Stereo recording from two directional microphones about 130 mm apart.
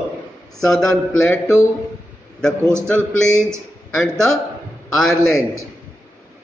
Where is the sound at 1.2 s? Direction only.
20° left (ahead or behind).